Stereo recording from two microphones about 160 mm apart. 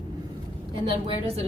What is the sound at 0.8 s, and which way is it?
Speech, 35° right (ahead or behind).